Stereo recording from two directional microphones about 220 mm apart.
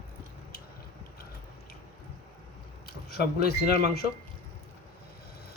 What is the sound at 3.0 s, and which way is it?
A man's voice, 45° left (ahead or behind).